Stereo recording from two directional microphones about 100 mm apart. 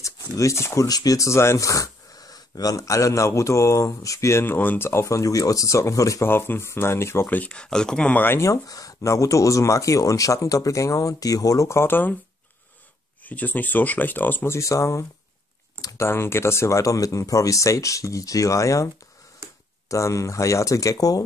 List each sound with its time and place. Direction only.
0.0 s speech: 30° left (ahead or behind)
13.2 s speech: 15° left (ahead or behind); by 15.0 s 30° left (ahead or behind)
15.8 s typing: 35° left (ahead or behind)
16.1 s speech: 25° left (ahead or behind)
19.4 s a sound: 30° right (ahead or behind)
19.9 s speech: 30° left (ahead or behind)